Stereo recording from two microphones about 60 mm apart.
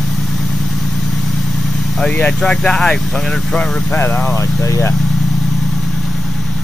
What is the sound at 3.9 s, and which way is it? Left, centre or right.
Speech, left.